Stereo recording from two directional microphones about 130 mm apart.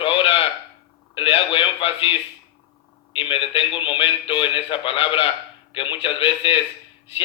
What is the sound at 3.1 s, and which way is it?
A man's voice, 40° left (ahead or behind).